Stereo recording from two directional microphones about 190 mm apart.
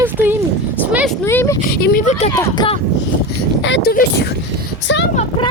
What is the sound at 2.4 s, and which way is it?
Speech, 25° left (ahead or behind).